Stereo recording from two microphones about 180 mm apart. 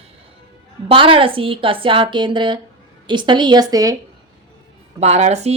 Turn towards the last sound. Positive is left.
turn(degrees=-40)  # may be behind; listen again after turning